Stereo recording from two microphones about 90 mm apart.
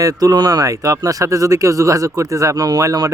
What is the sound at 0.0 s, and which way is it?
A man's voice, 40° right (ahead or behind).